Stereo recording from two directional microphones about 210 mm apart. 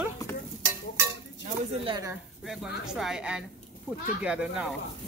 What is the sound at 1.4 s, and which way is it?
Speech, 30° right (ahead or behind).